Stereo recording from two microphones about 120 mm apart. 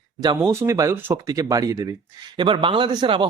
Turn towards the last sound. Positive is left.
turn(degrees=-40)  # may be behind; listen again after turning